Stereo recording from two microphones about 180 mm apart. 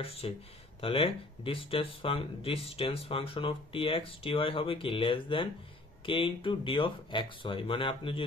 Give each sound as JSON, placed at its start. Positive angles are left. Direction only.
{"t": 0.2, "sound": "speech", "side_deg": 30}